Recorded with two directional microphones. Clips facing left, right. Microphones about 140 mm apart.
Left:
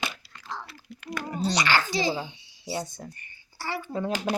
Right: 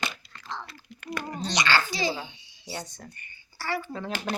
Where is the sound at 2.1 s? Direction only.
35° left (ahead or behind).